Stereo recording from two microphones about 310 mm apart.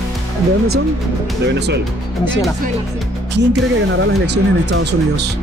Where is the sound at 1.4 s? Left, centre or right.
Right.